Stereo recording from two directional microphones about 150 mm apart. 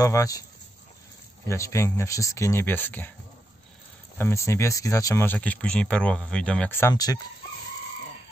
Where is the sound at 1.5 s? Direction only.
20° left (ahead or behind).